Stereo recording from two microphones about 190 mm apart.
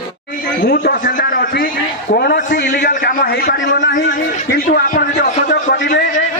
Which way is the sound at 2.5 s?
65° left (ahead or behind).